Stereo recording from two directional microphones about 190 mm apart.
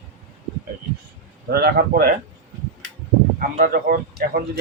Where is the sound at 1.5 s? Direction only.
55° right (ahead or behind).